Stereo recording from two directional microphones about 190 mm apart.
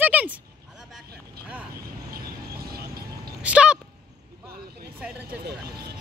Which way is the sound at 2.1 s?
55° right (ahead or behind).